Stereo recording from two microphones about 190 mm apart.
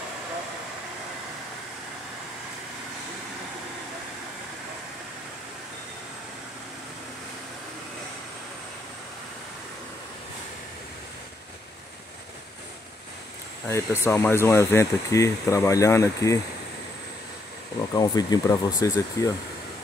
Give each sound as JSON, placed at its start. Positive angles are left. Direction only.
{"t": 13.7, "sound": "speech", "side_deg": 15}
{"t": 17.9, "sound": "speech", "side_deg": 20}